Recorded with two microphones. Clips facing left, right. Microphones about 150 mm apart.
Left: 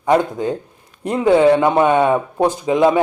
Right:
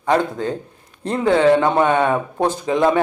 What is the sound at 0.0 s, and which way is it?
Speech, 15° left (ahead or behind).